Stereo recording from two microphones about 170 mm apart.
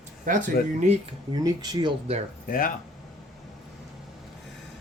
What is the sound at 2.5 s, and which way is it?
Speech, 55° left (ahead or behind).